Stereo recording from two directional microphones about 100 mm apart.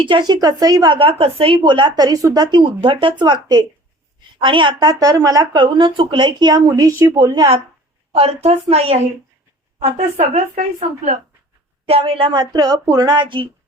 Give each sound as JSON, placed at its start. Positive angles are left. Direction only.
{"t": 0.0, "sound": "speech", "side_deg": -50}
{"t": 0.9, "sound": "a woman's voice", "side_deg": -65}
{"t": 2.0, "sound": "speech", "side_deg": -35}
{"t": 5.5, "sound": "speech", "side_deg": -55}
{"t": 8.1, "sound": "a woman's voice", "side_deg": -85}
{"t": 11.9, "sound": "speech", "side_deg": -70}